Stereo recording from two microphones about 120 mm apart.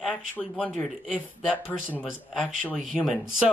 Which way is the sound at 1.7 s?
15° left (ahead or behind).